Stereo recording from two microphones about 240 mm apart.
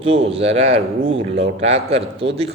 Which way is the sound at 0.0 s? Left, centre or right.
Right.